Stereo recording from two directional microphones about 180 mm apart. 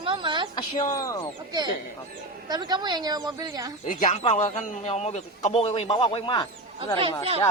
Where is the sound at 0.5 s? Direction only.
20° left (ahead or behind).